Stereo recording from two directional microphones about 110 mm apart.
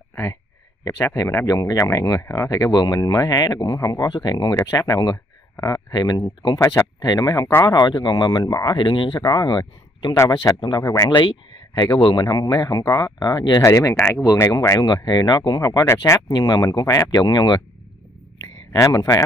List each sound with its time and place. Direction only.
0.1 s a sound: 25° left (ahead or behind)
0.8 s speech: 30° left (ahead or behind)
6.6 s speech: 25° left (ahead or behind)
7.0 s speech: 35° left (ahead or behind)
10.1 s speech: 30° left (ahead or behind)
10.5 s speech: 40° left (ahead or behind)
10.8 s speech: 30° left (ahead or behind)
11.1 s speech: 45° left (ahead or behind); by 13.9 s 30° left (ahead or behind)
13.9 s speech: 15° left (ahead or behind)
14.2 s speech: 30° left (ahead or behind)
16.3 s speech: 40° left (ahead or behind)
18.7 s speech: 35° left (ahead or behind)